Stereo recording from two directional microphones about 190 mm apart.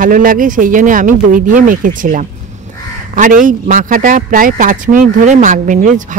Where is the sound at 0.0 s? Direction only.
45° right (ahead or behind).